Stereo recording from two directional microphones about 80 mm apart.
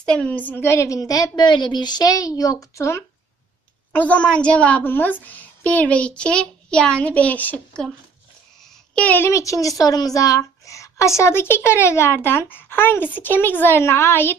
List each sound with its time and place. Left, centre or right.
0.0 s a child's voice: centre
0.7 s a woman's voice: left
1.3 s a woman's voice: left
3.9 s a child's voice: centre
8.9 s a woman's voice: centre
9.2 s a woman's voice: left